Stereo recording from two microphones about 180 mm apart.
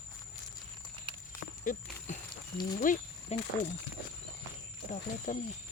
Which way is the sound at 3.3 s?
35° left (ahead or behind).